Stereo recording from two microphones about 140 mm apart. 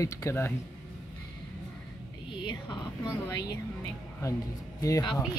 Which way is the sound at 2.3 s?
35° left (ahead or behind).